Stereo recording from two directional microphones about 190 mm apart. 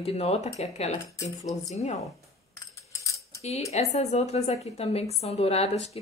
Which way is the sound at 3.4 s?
35° left (ahead or behind).